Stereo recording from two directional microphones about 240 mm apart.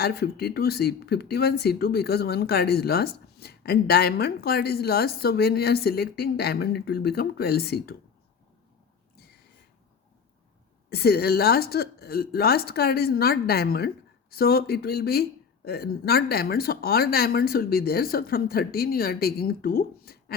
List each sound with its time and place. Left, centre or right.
0.0 s speech: left
10.8 s speech: left